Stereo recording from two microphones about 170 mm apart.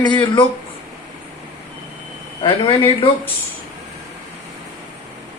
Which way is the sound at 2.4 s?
30° left (ahead or behind).